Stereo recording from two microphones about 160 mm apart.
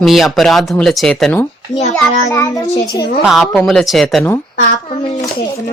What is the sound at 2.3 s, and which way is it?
Child singing, 20° left (ahead or behind).